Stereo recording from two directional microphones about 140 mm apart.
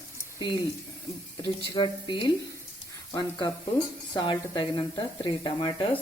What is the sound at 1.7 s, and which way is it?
Speech, 35° left (ahead or behind).